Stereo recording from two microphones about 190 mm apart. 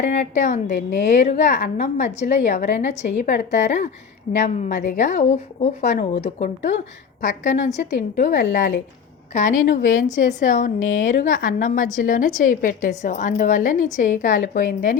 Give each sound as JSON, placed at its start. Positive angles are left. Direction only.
{"t": 0.0, "sound": "a woman's voice", "side_deg": 40}